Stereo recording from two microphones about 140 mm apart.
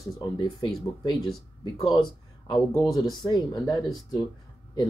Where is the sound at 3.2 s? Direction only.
30° left (ahead or behind).